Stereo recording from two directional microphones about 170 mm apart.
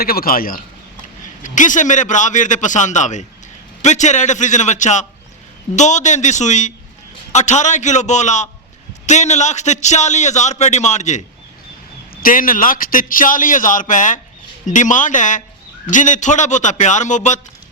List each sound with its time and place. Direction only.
0.0 s a man's voice: 60° left (ahead or behind); by 11.2 s 45° left (ahead or behind)
12.1 s a man's voice: 55° left (ahead or behind)